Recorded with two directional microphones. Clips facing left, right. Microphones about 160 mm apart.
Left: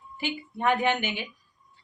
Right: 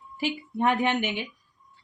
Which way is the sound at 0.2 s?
30° right (ahead or behind).